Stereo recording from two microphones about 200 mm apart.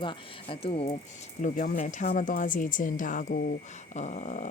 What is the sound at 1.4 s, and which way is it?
Speech, 40° left (ahead or behind).